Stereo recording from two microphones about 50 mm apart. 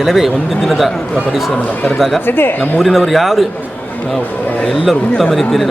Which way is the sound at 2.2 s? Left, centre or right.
Left.